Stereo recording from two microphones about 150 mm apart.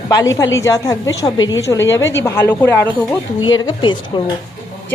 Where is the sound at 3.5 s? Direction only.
30° left (ahead or behind).